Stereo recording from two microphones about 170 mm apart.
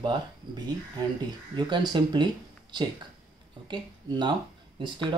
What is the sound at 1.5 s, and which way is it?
Speech, 25° right (ahead or behind).